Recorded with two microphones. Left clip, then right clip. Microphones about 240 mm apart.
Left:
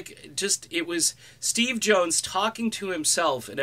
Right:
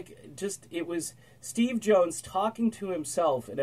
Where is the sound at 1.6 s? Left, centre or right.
Centre.